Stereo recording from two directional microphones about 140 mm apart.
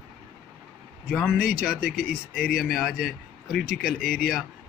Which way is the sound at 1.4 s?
90° left.